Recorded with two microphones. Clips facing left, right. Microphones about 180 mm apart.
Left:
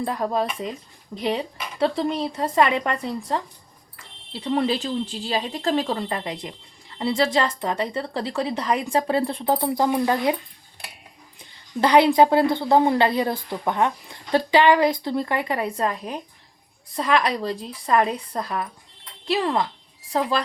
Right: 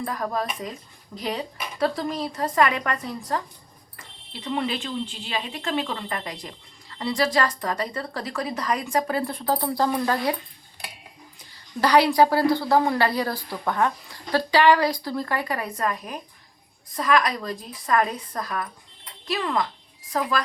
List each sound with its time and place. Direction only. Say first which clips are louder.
0.0 s a woman's voice: left 4 dB; 25° left (ahead or behind)
11.8 s a woman's voice: left 2 dB; 20° left (ahead or behind)